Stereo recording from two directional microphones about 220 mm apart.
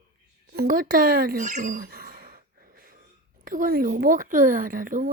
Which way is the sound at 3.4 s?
40° right (ahead or behind).